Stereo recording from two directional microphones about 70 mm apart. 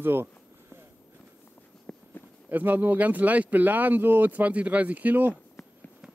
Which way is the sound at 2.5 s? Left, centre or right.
Right.